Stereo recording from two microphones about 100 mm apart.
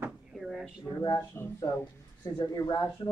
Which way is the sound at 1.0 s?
40° left (ahead or behind).